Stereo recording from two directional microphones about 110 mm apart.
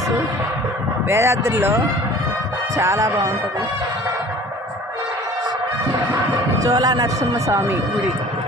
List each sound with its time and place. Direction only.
1.0 s speech: 25° right (ahead or behind)
2.8 s speech: 30° right (ahead or behind)
6.6 s speech: 35° right (ahead or behind)